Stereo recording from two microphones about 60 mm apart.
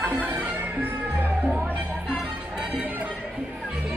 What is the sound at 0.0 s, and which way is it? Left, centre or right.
Music, right.